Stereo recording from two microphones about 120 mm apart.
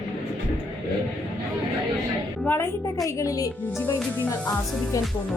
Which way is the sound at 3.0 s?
30° left (ahead or behind).